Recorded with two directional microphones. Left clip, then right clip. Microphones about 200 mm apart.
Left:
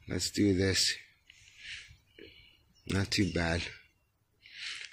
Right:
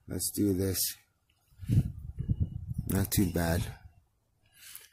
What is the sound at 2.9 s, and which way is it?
Speech, 40° right (ahead or behind).